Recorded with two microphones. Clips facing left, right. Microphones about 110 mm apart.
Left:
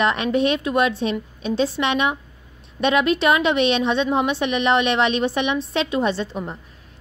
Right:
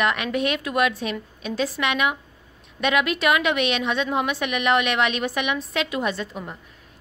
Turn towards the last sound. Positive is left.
turn(degrees=30)  # may be behind; listen again after turning